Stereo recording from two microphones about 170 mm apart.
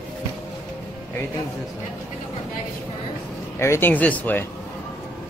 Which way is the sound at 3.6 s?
15° left (ahead or behind).